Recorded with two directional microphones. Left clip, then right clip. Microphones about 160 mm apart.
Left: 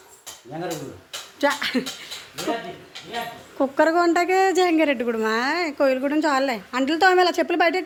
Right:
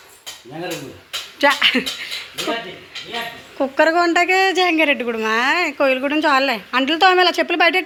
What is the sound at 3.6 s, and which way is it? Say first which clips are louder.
A woman's voice: right 3 dB; 20° left (ahead or behind).